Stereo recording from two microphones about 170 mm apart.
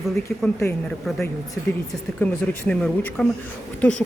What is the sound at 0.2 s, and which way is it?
Speech, 10° left (ahead or behind).